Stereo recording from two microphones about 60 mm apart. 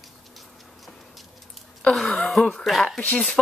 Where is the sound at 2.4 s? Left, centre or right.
Centre.